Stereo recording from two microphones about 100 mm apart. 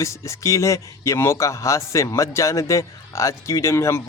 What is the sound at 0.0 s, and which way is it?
A man's voice, 30° left (ahead or behind).